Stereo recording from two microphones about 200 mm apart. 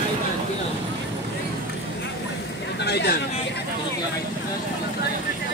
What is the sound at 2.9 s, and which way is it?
Speech, 55° left (ahead or behind).